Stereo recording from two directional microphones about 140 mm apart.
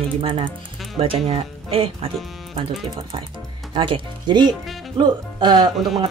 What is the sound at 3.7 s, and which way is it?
Speech, 35° right (ahead or behind).